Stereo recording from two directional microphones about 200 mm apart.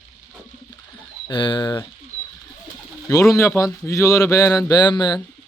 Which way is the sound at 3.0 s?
15° left (ahead or behind).